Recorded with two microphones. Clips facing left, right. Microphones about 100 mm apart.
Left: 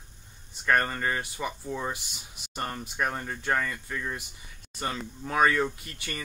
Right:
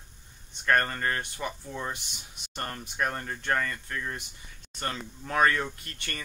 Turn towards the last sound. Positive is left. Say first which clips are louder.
# left 1 dB
turn(degrees=5)  # may be behind; listen again after turning